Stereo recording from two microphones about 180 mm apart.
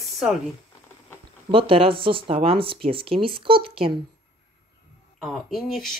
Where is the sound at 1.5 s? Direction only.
30° right (ahead or behind).